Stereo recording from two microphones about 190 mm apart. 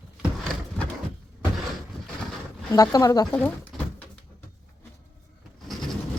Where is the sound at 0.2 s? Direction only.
5° left (ahead or behind).